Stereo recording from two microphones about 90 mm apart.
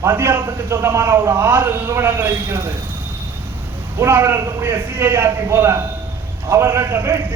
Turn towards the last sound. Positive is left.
turn(degrees=-25)  # may be behind; listen again after turning